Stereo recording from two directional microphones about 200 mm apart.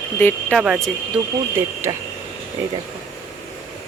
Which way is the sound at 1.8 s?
15° right (ahead or behind).